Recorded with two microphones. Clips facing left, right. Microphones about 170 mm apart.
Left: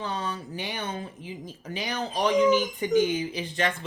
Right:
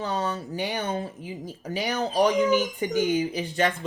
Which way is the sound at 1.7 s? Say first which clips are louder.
Right 5 dB; 35° right (ahead or behind).